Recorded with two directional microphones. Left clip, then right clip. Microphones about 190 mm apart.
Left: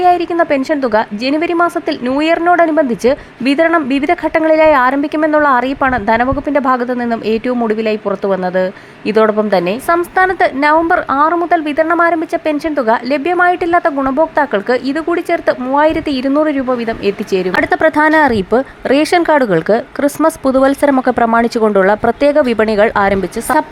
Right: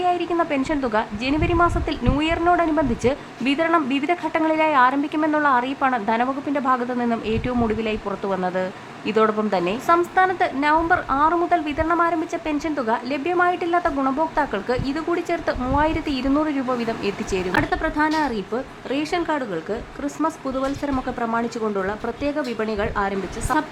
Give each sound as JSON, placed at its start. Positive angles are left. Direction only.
{"t": 0.0, "sound": "a woman's voice", "side_deg": 30}
{"t": 17.5, "sound": "speech", "side_deg": 45}